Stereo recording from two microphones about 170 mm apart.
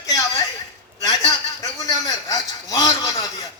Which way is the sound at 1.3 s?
20° left (ahead or behind).